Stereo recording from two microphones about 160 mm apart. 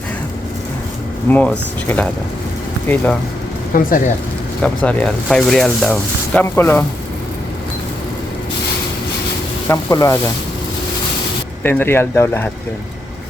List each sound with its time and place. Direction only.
1.3 s speech: 10° left (ahead or behind)
3.8 s speech: 60° left (ahead or behind)
4.6 s speech: 5° left (ahead or behind)
6.4 s speech: 15° left (ahead or behind)
9.6 s speech: 20° left (ahead or behind)
11.6 s speech: 15° left (ahead or behind)